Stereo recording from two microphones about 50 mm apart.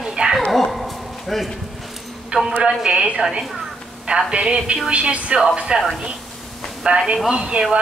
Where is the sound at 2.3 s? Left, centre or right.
Right.